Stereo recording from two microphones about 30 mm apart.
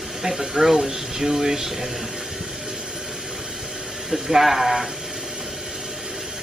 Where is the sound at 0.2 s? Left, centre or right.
Centre.